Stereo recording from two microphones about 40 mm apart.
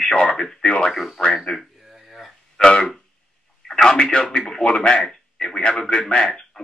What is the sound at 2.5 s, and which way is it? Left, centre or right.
Speech, centre.